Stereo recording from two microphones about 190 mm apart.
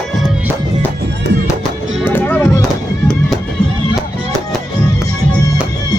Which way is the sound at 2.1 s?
10° left (ahead or behind).